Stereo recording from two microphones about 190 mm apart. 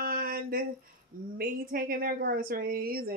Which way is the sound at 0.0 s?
50° right (ahead or behind).